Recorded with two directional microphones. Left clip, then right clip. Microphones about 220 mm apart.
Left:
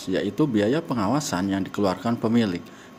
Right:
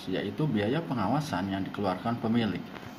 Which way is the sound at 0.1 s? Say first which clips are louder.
Left 8 dB; 55° left (ahead or behind).